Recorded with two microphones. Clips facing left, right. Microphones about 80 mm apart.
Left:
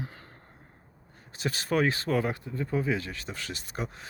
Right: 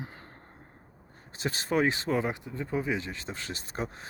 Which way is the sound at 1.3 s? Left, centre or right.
Right.